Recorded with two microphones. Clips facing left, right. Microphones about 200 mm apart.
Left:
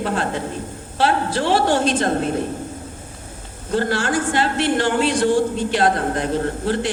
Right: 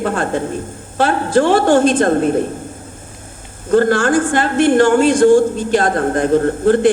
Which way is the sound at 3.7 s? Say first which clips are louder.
Right 8 dB; 50° right (ahead or behind).